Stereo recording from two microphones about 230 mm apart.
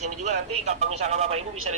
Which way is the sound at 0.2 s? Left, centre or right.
Right.